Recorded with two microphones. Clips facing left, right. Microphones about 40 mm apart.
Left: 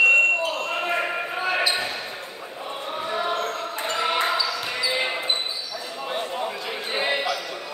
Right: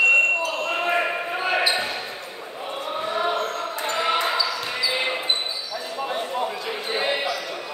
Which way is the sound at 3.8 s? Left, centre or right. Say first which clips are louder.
Right 1 dB; centre.